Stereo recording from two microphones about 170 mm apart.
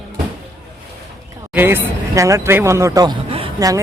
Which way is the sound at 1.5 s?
10° right (ahead or behind).